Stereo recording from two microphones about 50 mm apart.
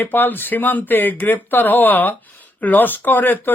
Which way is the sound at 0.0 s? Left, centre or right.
Left.